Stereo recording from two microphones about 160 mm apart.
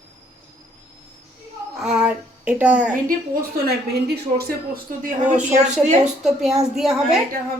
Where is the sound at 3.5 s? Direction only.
80° right; by 5.3 s 60° right (ahead or behind).